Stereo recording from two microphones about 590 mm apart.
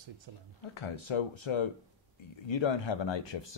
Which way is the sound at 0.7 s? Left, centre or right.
Left.